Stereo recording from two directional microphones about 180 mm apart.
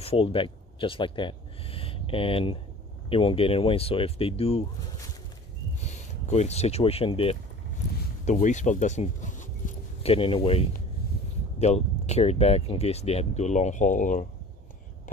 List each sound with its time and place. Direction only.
0.0 s speech: 30° left (ahead or behind)
5.8 s speech: 40° left (ahead or behind)
8.3 s a sound: 40° left (ahead or behind)
10.1 s speech: 30° left (ahead or behind)
11.6 s speech: 35° left (ahead or behind)